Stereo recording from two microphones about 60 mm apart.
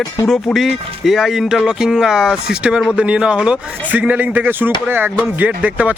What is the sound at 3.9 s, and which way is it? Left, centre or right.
Speech, right.